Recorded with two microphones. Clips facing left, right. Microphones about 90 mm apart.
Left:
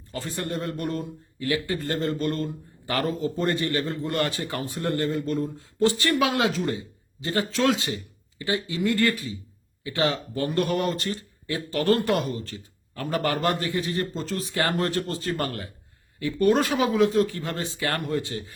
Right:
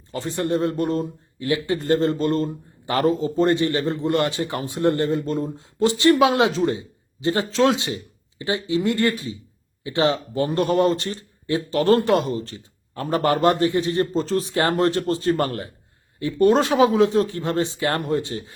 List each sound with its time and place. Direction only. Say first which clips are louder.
0.1 s speech: right 7 dB; 25° right (ahead or behind)